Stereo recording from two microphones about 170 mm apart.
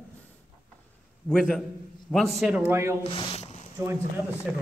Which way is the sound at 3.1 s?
30° left (ahead or behind).